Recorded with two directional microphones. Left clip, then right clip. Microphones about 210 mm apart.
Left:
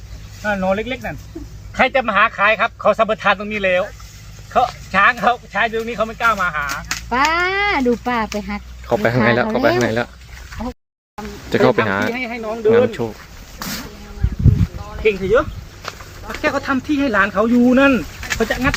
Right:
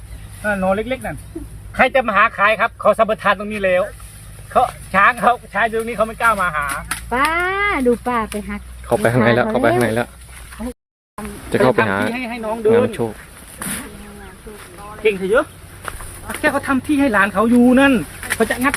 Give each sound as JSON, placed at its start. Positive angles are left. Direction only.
{"t": 0.4, "sound": "speech", "side_deg": -5}
{"t": 7.1, "sound": "speech", "side_deg": 55}
{"t": 8.9, "sound": "speech", "side_deg": -5}
{"t": 11.5, "sound": "speech", "side_deg": 0}
{"t": 12.1, "sound": "speech", "side_deg": -40}
{"t": 12.6, "sound": "speech", "side_deg": -5}
{"t": 15.0, "sound": "speech", "side_deg": -50}
{"t": 15.8, "sound": "a sound", "side_deg": 0}
{"t": 16.3, "sound": "speech", "side_deg": -55}